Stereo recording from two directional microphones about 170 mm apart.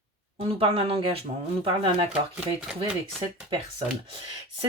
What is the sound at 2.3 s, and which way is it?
Speech, 5° right (ahead or behind).